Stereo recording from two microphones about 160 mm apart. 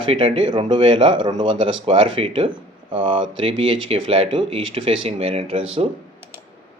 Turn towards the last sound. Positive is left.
turn(degrees=-40)  # may be behind; listen again after turning